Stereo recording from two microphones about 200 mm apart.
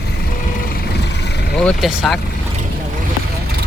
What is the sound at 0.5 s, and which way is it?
Vehicle, 45° left (ahead or behind).